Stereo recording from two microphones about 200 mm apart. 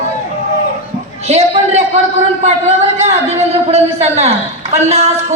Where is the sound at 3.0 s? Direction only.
30° right (ahead or behind).